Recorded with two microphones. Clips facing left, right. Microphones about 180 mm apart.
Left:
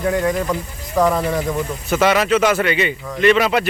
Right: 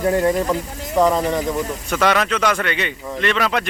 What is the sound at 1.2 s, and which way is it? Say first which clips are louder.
A man's voice: even; 5° left (ahead or behind).